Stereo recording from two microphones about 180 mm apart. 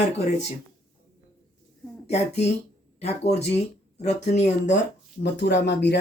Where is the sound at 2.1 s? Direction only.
35° left (ahead or behind).